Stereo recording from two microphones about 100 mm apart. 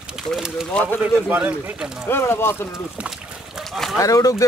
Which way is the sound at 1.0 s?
15° right (ahead or behind).